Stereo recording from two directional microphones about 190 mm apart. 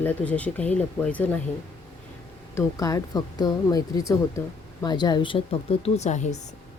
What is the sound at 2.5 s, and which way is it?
Speech, 15° left (ahead or behind).